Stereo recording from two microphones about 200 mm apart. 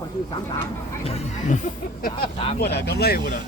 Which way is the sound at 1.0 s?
35° left (ahead or behind).